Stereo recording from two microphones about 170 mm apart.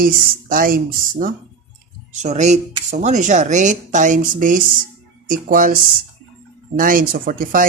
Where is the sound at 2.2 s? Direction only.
45° right (ahead or behind).